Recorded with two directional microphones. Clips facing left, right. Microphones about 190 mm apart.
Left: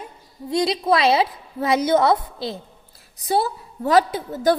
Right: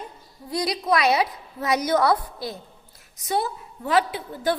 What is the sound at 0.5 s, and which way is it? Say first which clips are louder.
A woman's voice: left 4 dB; 25° left (ahead or behind).